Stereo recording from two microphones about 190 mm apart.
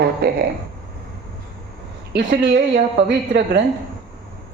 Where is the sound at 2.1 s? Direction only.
60° right (ahead or behind).